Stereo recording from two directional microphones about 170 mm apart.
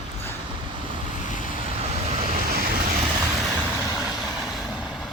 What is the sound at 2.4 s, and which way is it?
Vehicle, 60° right (ahead or behind).